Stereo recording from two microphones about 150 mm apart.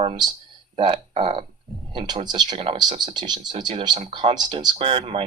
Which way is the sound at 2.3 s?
30° right (ahead or behind).